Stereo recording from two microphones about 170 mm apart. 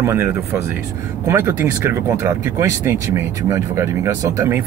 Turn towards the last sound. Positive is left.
turn(degrees=-15)  # may be behind; listen again after turning